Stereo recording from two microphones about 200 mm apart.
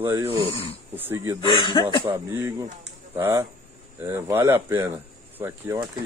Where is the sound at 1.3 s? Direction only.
25° left (ahead or behind).